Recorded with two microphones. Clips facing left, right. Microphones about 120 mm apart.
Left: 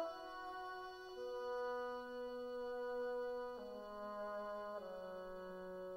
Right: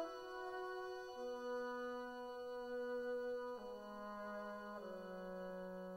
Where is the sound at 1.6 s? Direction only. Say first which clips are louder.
Left 2 dB; 25° left (ahead or behind).